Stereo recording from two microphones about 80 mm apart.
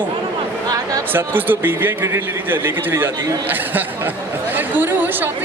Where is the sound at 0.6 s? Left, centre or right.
Right.